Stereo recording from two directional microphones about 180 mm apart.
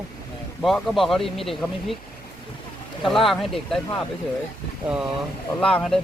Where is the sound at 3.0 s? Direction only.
Centre (ahead or behind).